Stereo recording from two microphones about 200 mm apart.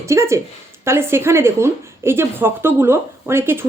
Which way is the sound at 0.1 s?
15° right (ahead or behind).